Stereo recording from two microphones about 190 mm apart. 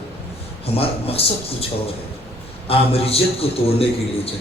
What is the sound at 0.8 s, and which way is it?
Speech, 30° left (ahead or behind).